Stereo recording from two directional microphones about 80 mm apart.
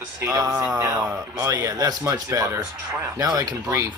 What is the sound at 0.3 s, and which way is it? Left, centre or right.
Speech, right.